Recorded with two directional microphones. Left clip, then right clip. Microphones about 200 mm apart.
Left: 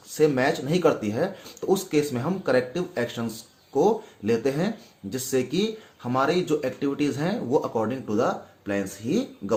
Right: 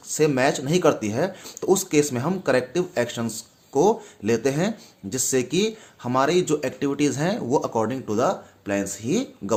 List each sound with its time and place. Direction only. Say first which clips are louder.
0.1 s speech: right 1 dB; 35° right (ahead or behind)